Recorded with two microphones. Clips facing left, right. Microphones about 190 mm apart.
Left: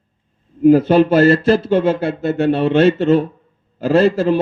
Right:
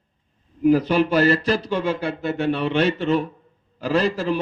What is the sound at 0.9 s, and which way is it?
Speech, 45° left (ahead or behind).